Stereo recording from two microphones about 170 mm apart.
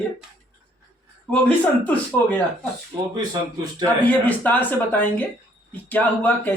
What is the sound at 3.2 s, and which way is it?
Speech, 25° right (ahead or behind).